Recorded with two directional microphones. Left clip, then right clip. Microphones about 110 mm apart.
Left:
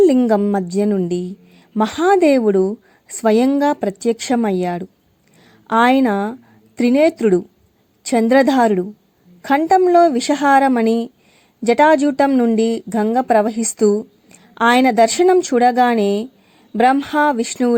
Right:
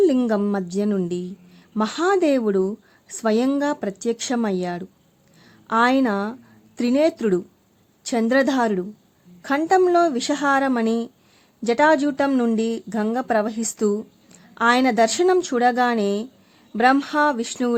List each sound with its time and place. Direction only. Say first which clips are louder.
0.5 s a woman's voice: left 6 dB; 35° left (ahead or behind)
12.3 s speech: left 5 dB; 20° left (ahead or behind)
12.5 s a woman's voice: left 7 dB; 30° left (ahead or behind)